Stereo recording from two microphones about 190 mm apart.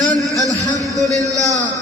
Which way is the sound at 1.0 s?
20° right (ahead or behind).